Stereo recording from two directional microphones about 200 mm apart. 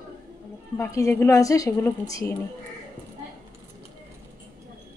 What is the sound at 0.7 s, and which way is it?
A woman's voice, 15° left (ahead or behind).